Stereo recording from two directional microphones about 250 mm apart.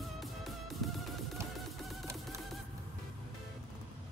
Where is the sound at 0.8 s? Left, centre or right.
Centre.